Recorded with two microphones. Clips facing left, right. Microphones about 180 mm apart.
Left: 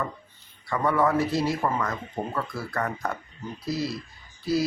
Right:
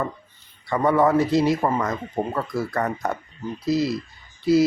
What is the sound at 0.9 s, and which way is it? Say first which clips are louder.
Speech: right 5 dB; 20° right (ahead or behind).